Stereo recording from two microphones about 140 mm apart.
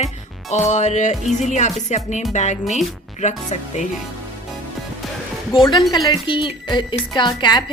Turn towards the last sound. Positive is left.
turn(degrees=30)  # may be behind; listen again after turning